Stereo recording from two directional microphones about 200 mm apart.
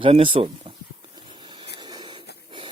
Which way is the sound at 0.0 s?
25° right (ahead or behind).